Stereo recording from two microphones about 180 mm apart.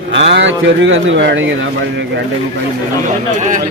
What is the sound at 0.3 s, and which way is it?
Speech, 90° right.